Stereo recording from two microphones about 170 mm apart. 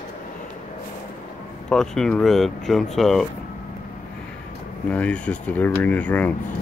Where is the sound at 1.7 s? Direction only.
5° left (ahead or behind).